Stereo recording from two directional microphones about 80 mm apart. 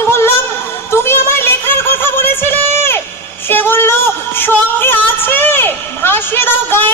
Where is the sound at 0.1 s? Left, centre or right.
Left.